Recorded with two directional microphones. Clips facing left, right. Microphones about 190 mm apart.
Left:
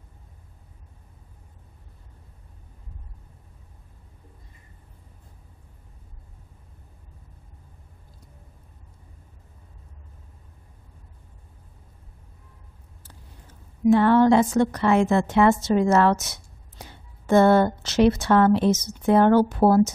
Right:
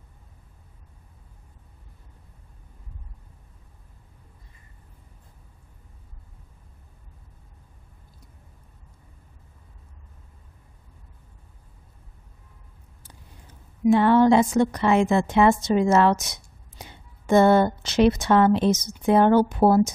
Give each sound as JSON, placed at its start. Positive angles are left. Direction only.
{"t": 13.8, "sound": "a woman's voice", "side_deg": -15}